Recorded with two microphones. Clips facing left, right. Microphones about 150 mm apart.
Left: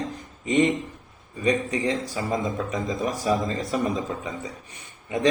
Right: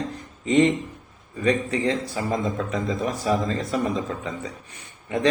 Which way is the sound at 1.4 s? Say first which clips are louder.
Right 1 dB; 15° left (ahead or behind).